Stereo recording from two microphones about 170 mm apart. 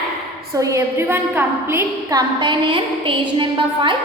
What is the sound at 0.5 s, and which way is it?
A woman's voice, 20° right (ahead or behind).